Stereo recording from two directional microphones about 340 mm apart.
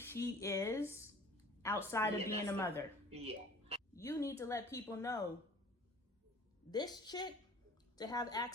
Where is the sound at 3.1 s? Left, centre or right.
Centre.